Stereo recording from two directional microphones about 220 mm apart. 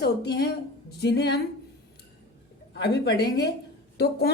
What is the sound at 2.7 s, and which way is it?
Speech, 50° left (ahead or behind).